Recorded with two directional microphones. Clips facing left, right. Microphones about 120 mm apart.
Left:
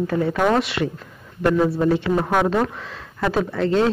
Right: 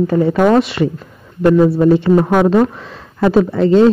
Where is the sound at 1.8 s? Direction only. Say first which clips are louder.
Right 8 dB; 20° right (ahead or behind).